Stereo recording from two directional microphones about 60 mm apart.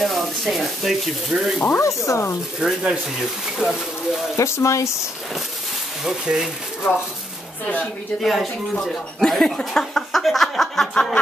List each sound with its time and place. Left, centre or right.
0.0 s speech: centre
1.8 s speech: left
2.6 s speech: centre
4.4 s speech: left
6.0 s speech: centre
6.8 s speech: left
8.2 s speech: centre
9.6 s a sound: centre